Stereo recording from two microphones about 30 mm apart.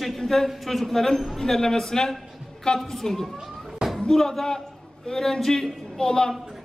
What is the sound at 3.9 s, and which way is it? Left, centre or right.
Speech, centre.